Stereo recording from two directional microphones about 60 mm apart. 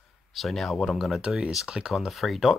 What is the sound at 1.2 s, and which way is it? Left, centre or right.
Speech, centre.